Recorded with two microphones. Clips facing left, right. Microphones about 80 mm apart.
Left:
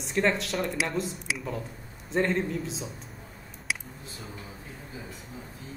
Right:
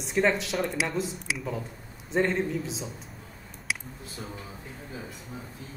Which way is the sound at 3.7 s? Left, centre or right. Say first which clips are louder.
Even; centre.